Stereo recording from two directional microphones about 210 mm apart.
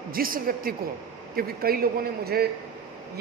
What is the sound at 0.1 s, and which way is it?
Speech, 45° right (ahead or behind).